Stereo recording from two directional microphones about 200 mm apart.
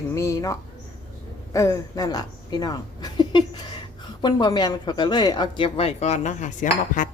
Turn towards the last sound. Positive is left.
turn(degrees=40)  # may be behind; listen again after turning